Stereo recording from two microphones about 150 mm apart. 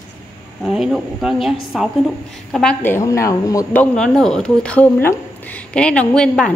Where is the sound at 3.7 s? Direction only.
5° left (ahead or behind).